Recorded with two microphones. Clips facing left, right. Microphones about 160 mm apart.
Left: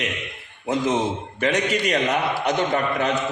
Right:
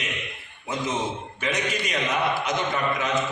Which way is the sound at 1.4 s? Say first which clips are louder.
Left 6 dB; 65° left (ahead or behind).